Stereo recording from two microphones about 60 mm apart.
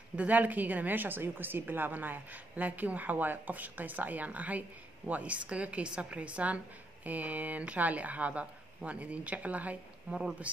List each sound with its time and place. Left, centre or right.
0.1 s a woman's voice: right